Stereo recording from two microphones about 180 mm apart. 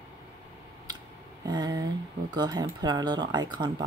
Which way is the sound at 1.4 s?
20° right (ahead or behind).